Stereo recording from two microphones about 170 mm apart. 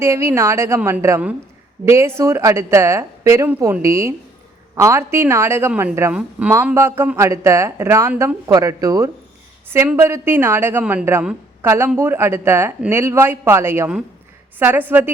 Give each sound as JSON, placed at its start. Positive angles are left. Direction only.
{"t": 0.0, "sound": "a woman's voice", "side_deg": -15}